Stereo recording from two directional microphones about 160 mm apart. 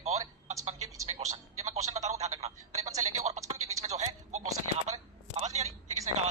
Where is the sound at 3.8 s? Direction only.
45° right (ahead or behind).